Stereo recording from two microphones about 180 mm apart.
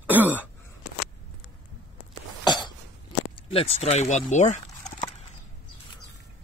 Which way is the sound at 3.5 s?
35° left (ahead or behind).